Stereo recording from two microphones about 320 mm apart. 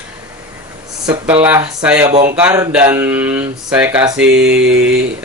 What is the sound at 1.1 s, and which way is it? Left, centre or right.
Speech, centre.